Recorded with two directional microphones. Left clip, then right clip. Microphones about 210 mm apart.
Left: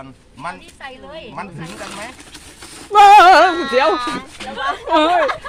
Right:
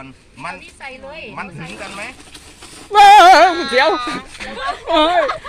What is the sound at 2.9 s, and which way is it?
Speech, 10° left (ahead or behind).